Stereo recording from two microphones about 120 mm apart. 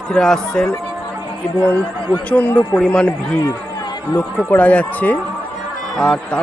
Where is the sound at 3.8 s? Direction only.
35° left (ahead or behind).